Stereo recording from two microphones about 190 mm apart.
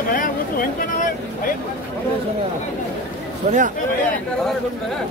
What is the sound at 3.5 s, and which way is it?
Speech, 35° right (ahead or behind).